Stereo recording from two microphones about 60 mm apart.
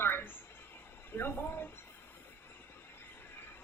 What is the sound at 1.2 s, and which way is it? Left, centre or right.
Speech, left.